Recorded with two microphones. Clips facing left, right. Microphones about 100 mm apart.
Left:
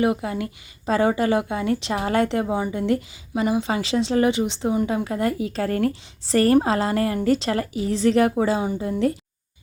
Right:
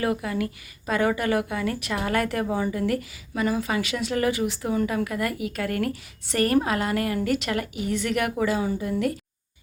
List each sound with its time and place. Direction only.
0.0 s a woman's voice: 25° left (ahead or behind)